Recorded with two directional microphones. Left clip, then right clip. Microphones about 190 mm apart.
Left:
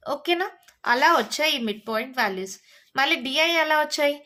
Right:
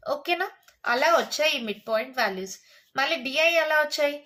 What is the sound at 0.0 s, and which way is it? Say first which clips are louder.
Speech: left 2 dB; 30° left (ahead or behind).